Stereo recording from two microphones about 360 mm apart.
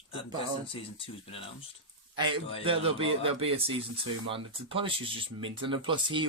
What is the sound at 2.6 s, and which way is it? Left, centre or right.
Speech, centre.